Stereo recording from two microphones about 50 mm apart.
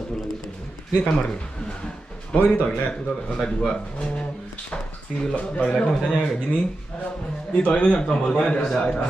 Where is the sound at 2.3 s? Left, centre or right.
Left.